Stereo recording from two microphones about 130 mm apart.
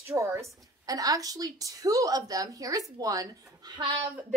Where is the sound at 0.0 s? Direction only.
20° right (ahead or behind).